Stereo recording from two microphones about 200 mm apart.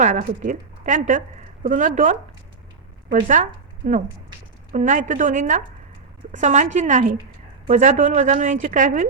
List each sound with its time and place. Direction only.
0.0 s a woman's voice: 40° right (ahead or behind)